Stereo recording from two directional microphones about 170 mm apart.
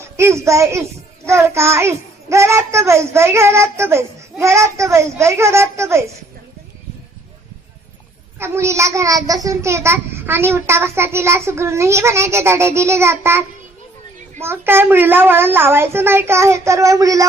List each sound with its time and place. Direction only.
0.2 s a child's voice: 15° right (ahead or behind)
8.4 s a child's voice: 15° right (ahead or behind)
14.4 s a child's voice: 15° right (ahead or behind)